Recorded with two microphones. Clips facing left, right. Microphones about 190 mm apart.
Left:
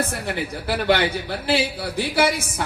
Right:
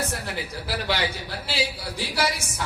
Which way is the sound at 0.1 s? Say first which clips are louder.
Left 5 dB; 55° left (ahead or behind).